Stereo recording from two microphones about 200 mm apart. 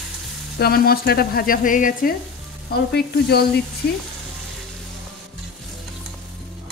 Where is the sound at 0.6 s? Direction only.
50° left (ahead or behind).